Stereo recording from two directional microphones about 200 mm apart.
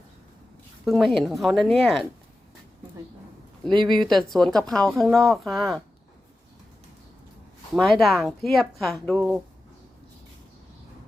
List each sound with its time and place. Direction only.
0.9 s a woman's voice: centre (ahead or behind)
3.7 s speech: 25° right (ahead or behind)
3.9 s a woman's voice: centre (ahead or behind)
7.8 s a woman's voice: centre (ahead or behind)